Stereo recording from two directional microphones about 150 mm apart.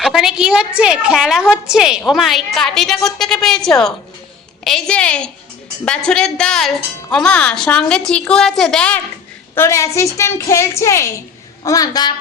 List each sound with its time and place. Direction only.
0.0 s a woman's voice: 5° right (ahead or behind)
9.6 s a woman's voice: 20° left (ahead or behind)